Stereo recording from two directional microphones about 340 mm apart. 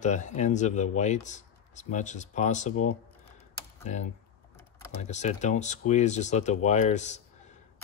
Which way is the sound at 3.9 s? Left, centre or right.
Centre.